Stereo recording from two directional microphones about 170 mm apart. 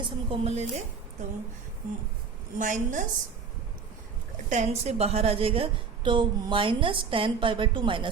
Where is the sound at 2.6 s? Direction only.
50° right (ahead or behind).